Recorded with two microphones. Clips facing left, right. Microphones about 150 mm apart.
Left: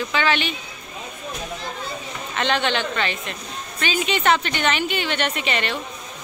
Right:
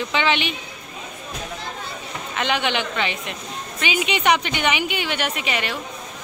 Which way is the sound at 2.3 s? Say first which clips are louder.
Left 1 dB; 10° right (ahead or behind).